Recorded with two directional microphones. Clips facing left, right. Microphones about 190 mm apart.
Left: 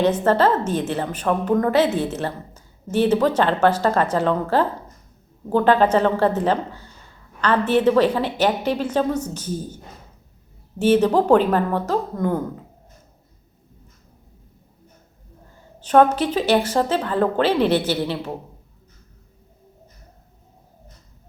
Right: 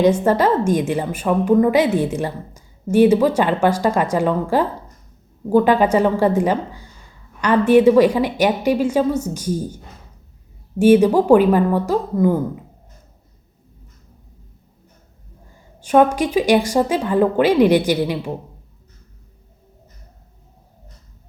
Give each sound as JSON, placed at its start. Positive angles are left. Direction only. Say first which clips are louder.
{"t": 0.0, "sound": "a woman's voice", "louder": "right 2 dB", "side_deg": -10}
{"t": 15.8, "sound": "a woman's voice", "louder": "right 1 dB", "side_deg": -10}